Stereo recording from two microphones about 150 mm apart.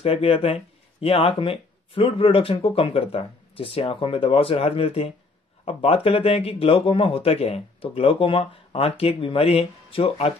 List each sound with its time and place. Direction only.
0.0 s speech: 40° left (ahead or behind)